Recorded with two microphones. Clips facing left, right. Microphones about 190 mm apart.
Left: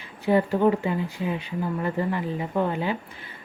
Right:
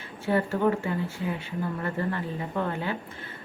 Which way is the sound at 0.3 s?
15° left (ahead or behind).